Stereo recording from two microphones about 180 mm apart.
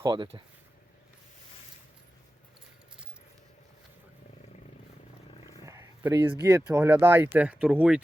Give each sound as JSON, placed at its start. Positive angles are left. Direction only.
{"t": 0.0, "sound": "speech", "side_deg": -25}
{"t": 5.6, "sound": "roaring cats", "side_deg": -15}
{"t": 6.5, "sound": "speech", "side_deg": -10}